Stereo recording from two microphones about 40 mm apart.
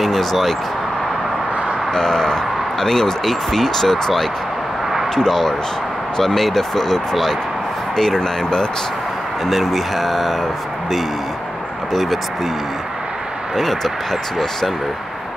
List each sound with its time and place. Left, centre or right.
0.0 s speech: centre
2.0 s speech: centre
9.5 s speech: centre
11.9 s speech: centre
13.6 s speech: centre